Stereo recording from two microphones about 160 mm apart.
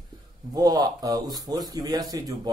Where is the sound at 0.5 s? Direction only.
25° right (ahead or behind).